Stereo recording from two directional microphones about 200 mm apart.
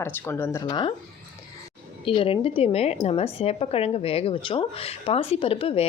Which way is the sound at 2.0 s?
25° left (ahead or behind).